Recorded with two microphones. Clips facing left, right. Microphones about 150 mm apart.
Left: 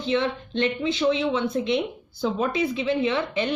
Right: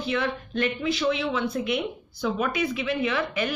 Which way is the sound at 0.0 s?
25° left (ahead or behind).